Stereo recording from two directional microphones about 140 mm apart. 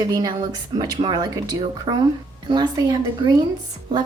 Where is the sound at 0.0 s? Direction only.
25° right (ahead or behind).